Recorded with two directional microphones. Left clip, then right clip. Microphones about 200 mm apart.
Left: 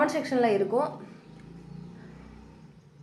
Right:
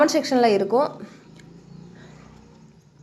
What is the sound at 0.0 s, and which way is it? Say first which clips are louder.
Speech: right 7 dB; 55° right (ahead or behind).